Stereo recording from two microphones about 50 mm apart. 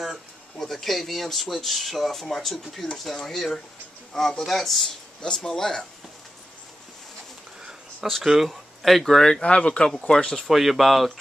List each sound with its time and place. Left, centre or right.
0.6 s speech: centre
5.2 s speech: centre
8.1 s speech: centre
10.5 s speech: centre